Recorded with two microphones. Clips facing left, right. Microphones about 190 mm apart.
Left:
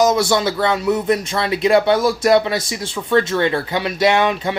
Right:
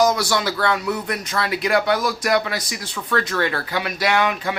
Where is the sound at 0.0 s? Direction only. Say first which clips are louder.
Left 4 dB; 25° left (ahead or behind).